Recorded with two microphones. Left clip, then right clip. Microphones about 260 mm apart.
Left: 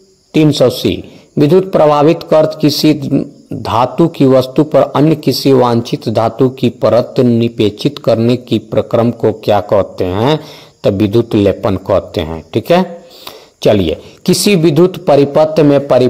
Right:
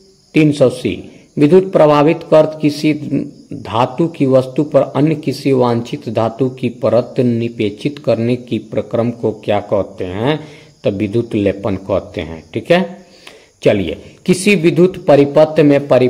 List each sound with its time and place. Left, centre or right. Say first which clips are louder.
0.3 s a man's voice: left 2 dB; left